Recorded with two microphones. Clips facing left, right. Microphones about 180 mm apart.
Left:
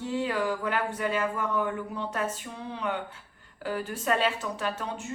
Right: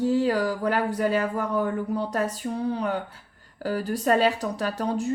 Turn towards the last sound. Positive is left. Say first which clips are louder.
# right 7 dB
turn(degrees=-35)  # may be behind; listen again after turning